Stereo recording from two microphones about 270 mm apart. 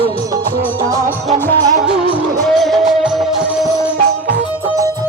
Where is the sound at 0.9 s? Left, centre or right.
Centre.